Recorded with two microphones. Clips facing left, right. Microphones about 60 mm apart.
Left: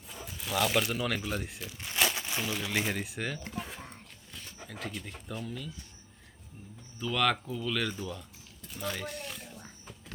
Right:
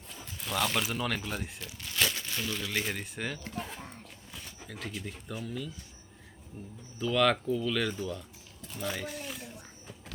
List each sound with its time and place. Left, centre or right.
0.1 s speech: centre
2.0 s crumpling: centre
2.9 s speech: centre
3.4 s a sound: centre
7.0 s speech: centre
8.6 s a sound: centre